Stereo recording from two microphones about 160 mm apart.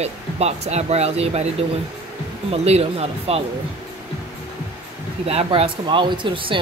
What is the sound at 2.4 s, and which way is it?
Speech, 40° right (ahead or behind).